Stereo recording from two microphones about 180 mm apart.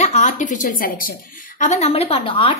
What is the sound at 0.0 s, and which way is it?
A woman's voice, 40° left (ahead or behind).